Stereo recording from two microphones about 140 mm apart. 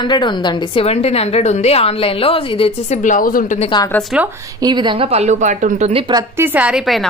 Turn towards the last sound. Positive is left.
turn(degrees=0)  # may be behind; listen again after turning